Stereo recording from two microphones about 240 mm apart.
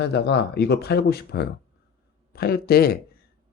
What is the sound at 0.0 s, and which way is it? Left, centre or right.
Speech, left.